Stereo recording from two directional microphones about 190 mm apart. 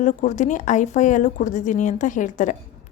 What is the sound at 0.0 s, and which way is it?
A woman's voice, 40° left (ahead or behind).